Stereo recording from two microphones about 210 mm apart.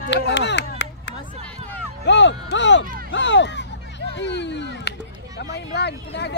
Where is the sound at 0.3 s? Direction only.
55° left (ahead or behind).